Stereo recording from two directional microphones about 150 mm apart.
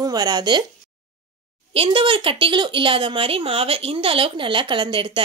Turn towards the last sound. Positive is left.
turn(degrees=-35)  # may be behind; listen again after turning